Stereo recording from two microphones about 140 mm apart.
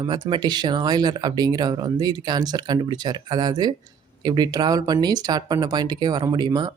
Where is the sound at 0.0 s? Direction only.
30° right (ahead or behind).